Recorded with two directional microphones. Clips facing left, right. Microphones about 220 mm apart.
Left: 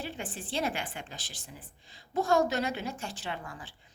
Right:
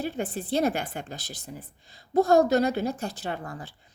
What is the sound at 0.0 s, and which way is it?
A woman's voice, 40° right (ahead or behind).